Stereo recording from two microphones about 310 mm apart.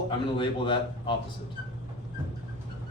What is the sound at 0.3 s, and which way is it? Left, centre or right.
Speech, centre.